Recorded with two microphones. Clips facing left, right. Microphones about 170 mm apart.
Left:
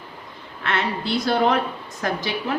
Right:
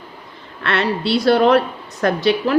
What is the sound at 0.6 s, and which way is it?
A woman's voice, 75° right (ahead or behind).